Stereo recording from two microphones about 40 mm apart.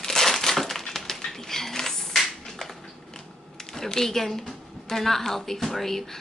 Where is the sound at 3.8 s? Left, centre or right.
Centre.